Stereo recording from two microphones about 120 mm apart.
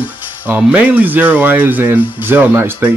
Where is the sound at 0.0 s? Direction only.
10° right (ahead or behind).